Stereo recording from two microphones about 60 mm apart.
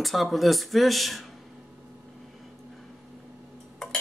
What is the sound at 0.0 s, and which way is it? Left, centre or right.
Speech, centre.